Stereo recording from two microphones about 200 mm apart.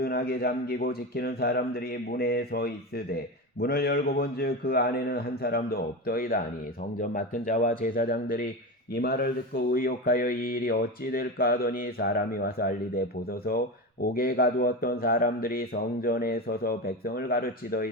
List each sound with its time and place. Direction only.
0.0 s speech: 50° left (ahead or behind)